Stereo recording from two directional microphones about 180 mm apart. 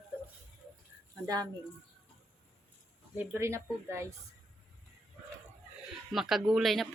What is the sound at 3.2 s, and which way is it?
Speech, 15° right (ahead or behind).